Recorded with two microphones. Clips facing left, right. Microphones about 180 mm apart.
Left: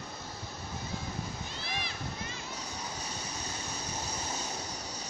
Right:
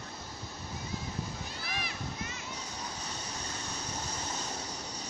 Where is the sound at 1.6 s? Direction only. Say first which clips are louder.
Left 1 dB; 25° left (ahead or behind).